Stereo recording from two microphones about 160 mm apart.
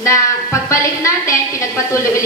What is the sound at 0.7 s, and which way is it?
A woman's voice, 20° left (ahead or behind).